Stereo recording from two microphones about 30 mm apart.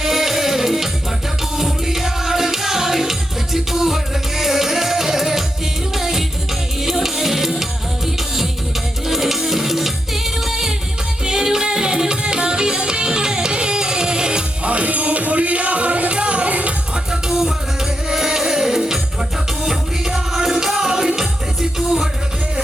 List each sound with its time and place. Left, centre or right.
0.0 s music: centre; by 14.4 s right
14.6 s music: right
17.2 s music: centre